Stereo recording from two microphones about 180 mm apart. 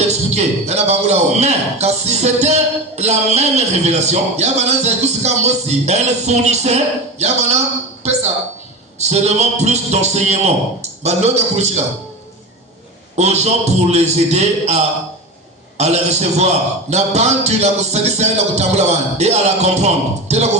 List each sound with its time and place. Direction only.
0.1 s speech: 35° right (ahead or behind)
13.1 s speech: 40° right (ahead or behind)